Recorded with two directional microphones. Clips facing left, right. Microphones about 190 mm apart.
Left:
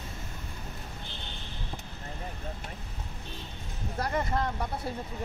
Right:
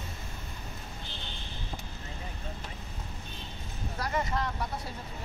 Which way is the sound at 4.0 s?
50° left (ahead or behind).